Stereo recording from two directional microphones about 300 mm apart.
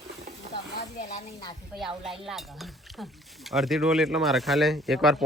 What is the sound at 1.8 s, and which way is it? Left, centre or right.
Speech, centre.